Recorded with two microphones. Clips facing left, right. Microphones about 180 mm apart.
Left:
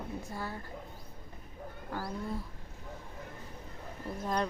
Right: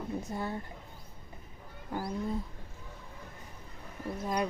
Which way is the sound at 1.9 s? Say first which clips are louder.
Right 3 dB; 15° right (ahead or behind).